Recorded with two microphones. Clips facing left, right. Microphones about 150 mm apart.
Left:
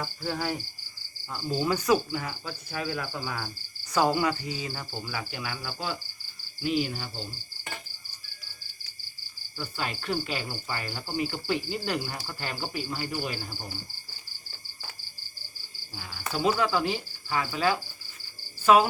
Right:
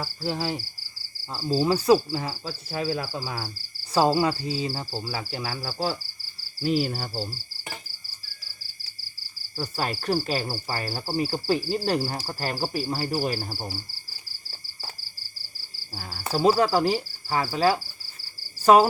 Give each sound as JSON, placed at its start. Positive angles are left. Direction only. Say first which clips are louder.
{"t": 0.2, "sound": "speech", "louder": "right 3 dB", "side_deg": -25}
{"t": 9.6, "sound": "speech", "louder": "right 5 dB", "side_deg": -35}
{"t": 16.0, "sound": "cricket", "louder": "right 5 dB", "side_deg": -35}